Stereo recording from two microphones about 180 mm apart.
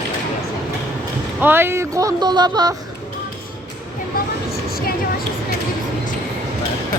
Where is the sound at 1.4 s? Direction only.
10° right (ahead or behind).